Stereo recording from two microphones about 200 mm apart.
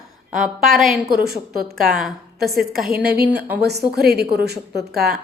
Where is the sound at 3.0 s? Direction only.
50° right (ahead or behind).